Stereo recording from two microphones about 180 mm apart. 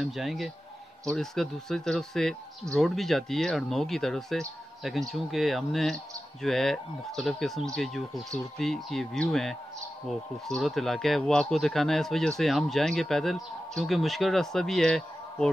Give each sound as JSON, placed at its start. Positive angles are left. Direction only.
{"t": 0.0, "sound": "speech", "side_deg": 0}